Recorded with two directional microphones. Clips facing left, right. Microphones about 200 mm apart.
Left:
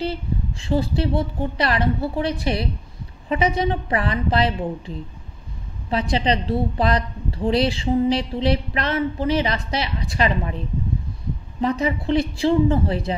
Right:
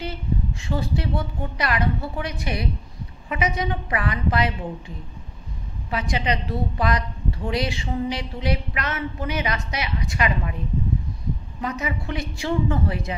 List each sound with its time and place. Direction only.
0.0 s a woman's voice: 30° left (ahead or behind)
11.6 s a woman's voice: 30° left (ahead or behind)